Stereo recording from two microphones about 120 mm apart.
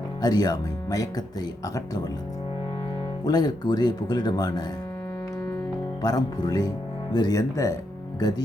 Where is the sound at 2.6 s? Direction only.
40° left (ahead or behind).